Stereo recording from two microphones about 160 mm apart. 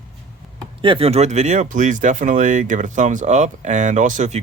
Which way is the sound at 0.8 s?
35° right (ahead or behind).